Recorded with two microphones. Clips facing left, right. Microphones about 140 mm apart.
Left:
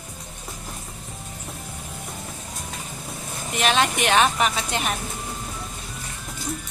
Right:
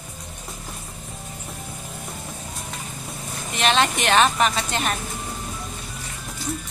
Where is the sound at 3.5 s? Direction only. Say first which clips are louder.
Right 1 dB; 10° left (ahead or behind).